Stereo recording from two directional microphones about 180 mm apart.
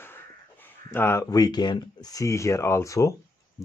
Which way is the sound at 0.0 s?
10° left (ahead or behind).